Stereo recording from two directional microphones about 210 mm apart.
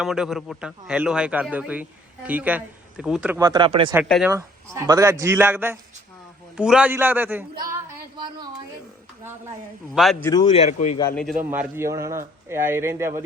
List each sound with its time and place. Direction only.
0.0 s a man's voice: centre (ahead or behind)
3.4 s speech: 20° right (ahead or behind)
3.9 s a man's voice: 5° right (ahead or behind)
9.9 s a man's voice: centre (ahead or behind)
10.2 s speech: 20° left (ahead or behind)
10.7 s a man's voice: 35° left (ahead or behind)
11.1 s a man's voice: centre (ahead or behind)
11.5 s speech: 10° right (ahead or behind)